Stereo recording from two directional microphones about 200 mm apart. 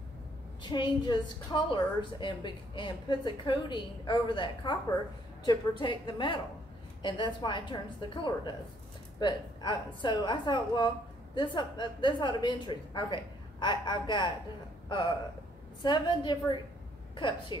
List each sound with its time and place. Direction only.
0.6 s a woman's voice: 25° left (ahead or behind)